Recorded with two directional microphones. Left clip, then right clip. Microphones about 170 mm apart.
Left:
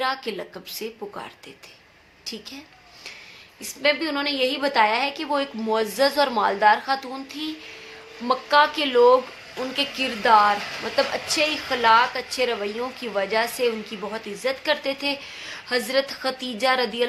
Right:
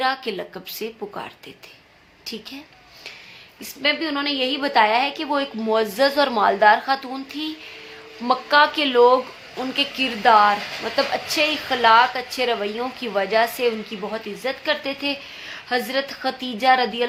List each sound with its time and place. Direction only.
0.0 s a woman's voice: 15° right (ahead or behind)
3.6 s a woman's voice: 5° right (ahead or behind)